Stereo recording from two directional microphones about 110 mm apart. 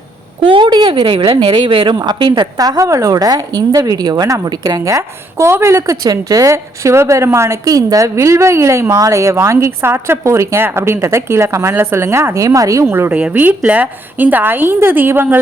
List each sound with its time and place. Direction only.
0.4 s speech: 50° right (ahead or behind); by 15.4 s 20° right (ahead or behind)